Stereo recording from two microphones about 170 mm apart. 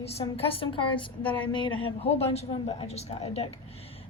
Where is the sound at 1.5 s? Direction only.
30° left (ahead or behind).